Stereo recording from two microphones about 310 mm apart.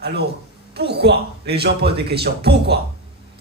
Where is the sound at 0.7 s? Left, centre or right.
Right.